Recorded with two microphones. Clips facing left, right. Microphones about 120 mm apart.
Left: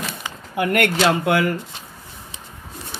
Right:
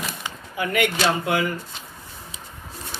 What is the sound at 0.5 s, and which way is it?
Speech, 75° left (ahead or behind).